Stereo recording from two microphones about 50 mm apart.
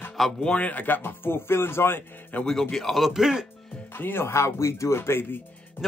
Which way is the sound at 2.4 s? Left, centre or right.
Centre.